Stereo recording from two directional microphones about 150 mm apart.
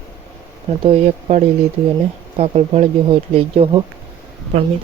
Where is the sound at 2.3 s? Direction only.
40° right (ahead or behind).